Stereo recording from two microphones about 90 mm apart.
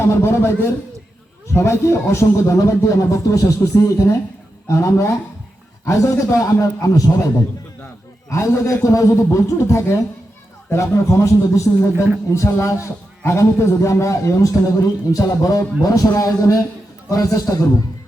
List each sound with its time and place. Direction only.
0.0 s a man's voice: 30° left (ahead or behind)